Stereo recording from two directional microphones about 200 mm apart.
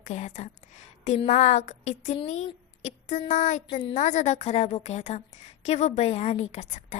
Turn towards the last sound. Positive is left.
turn(degrees=35)  # may be behind; listen again after turning